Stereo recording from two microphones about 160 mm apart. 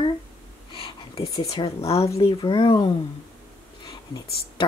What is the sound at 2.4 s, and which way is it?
Speech, 30° left (ahead or behind).